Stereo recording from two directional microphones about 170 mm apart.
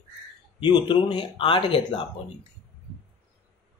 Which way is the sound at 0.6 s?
25° left (ahead or behind).